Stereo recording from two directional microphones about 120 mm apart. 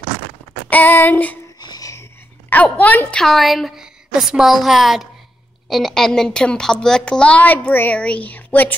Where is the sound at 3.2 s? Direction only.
Centre (ahead or behind).